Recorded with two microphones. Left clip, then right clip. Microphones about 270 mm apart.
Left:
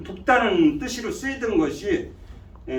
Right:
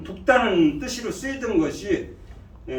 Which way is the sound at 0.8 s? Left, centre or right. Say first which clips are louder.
Even; centre.